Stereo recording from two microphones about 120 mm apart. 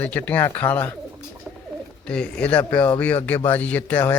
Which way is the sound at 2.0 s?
10° left (ahead or behind).